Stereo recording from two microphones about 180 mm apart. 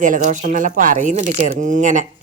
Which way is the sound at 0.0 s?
45° right (ahead or behind).